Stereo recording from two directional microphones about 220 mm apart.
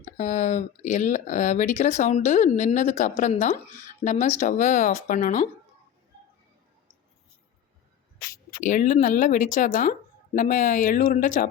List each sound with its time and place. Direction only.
0.2 s speech: 35° left (ahead or behind)
8.6 s speech: 35° left (ahead or behind)